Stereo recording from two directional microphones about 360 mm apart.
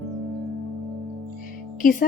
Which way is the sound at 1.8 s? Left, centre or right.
Left.